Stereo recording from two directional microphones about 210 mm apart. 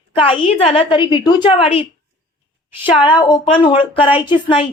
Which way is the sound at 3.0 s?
20° left (ahead or behind).